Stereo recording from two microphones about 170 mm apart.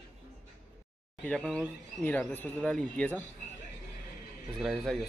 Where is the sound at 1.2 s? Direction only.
5° left (ahead or behind).